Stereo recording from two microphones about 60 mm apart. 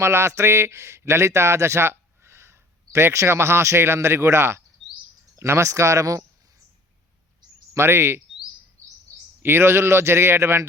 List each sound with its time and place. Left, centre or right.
0.0 s a man's voice: right
7.7 s speech: right
9.4 s speech: right